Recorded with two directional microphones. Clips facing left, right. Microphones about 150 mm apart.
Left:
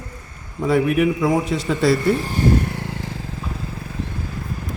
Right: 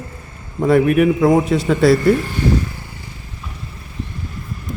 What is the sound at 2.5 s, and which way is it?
Vehicle, 65° left (ahead or behind).